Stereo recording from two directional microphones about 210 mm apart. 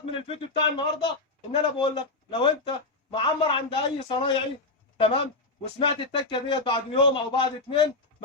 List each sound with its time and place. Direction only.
0.0 s a man's voice: 25° left (ahead or behind)